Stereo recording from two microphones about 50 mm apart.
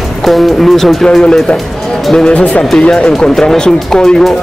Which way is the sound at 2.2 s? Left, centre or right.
Left.